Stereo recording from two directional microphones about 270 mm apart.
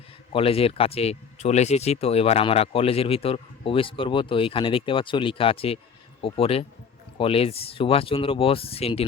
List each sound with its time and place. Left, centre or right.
0.3 s speech: left